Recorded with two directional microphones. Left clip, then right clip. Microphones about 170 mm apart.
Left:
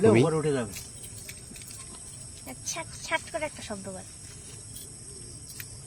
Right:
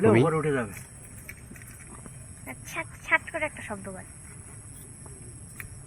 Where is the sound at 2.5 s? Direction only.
65° left (ahead or behind).